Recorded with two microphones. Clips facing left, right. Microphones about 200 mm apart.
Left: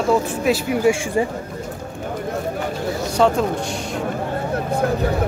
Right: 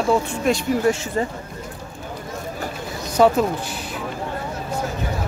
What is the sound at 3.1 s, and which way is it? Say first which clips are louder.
Speech: right 2 dB; 5° right (ahead or behind).